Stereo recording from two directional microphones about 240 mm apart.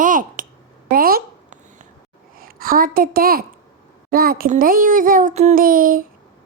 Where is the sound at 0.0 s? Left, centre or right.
Right.